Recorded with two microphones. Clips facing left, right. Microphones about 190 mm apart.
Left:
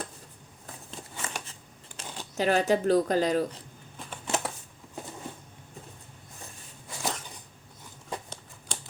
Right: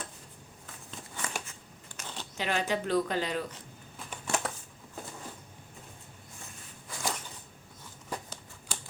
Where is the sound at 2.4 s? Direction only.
40° left (ahead or behind).